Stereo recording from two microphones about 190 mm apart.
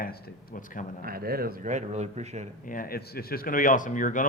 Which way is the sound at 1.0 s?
50° right (ahead or behind).